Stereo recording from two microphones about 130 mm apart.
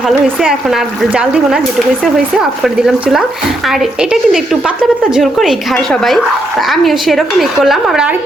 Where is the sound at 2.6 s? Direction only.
5° right (ahead or behind).